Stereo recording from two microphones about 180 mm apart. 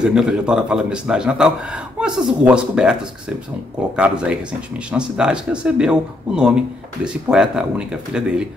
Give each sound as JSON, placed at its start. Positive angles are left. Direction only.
{"t": 0.0, "sound": "a man's voice", "side_deg": -5}